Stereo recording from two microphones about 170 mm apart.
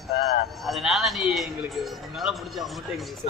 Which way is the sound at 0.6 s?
Centre (ahead or behind).